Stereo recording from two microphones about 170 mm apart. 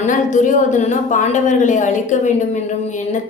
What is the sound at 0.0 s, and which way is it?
Speech, 50° left (ahead or behind).